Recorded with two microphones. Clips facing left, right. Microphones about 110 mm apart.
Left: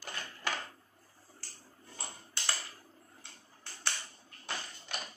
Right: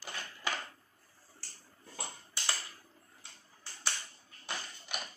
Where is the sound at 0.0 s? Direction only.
Centre (ahead or behind).